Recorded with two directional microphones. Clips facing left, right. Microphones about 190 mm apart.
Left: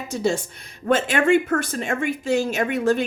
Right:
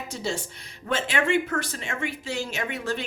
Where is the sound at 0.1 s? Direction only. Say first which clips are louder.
Left 9 dB; 50° left (ahead or behind).